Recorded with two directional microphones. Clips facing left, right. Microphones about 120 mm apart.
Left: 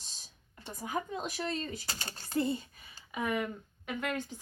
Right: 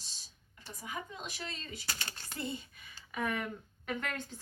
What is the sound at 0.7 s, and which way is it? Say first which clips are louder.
A woman's voice: left 7 dB; 45° left (ahead or behind).